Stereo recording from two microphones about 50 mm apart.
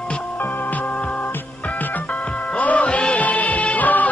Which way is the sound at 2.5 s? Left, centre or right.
Left.